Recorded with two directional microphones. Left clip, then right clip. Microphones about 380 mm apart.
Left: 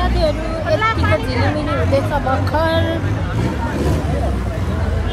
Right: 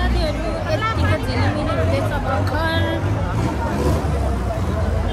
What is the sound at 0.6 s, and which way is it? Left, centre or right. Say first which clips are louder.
Speech: left 7 dB; centre.